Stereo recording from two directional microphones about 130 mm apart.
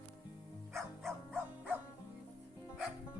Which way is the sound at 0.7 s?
Centre (ahead or behind).